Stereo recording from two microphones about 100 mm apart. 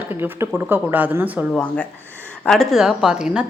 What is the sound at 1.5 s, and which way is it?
Speech, 10° left (ahead or behind).